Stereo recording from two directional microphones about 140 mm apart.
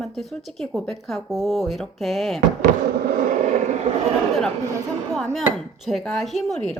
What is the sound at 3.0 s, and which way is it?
Fireworks, 85° right.